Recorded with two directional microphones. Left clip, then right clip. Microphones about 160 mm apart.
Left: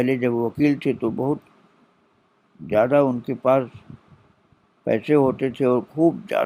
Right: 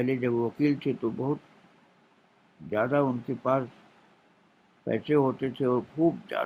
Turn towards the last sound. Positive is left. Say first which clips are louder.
# left 7 dB
turn(degrees=45)  # may be behind; listen again after turning